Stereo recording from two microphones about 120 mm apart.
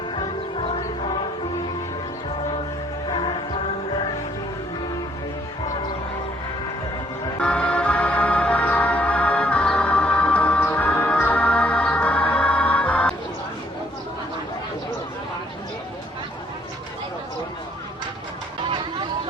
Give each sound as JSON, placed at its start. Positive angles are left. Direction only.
{"t": 0.2, "sound": "music", "side_deg": 45}
{"t": 3.1, "sound": "music", "side_deg": 45}
{"t": 7.3, "sound": "music", "side_deg": 10}